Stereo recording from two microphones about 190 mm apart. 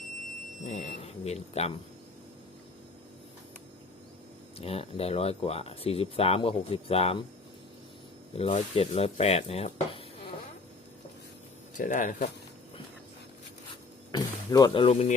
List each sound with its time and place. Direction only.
0.6 s speech: 35° left (ahead or behind)
4.5 s speech: 30° left (ahead or behind)
8.4 s speech: 35° left (ahead or behind)
11.7 s speech: 45° left (ahead or behind)
14.1 s speech: 20° left (ahead or behind)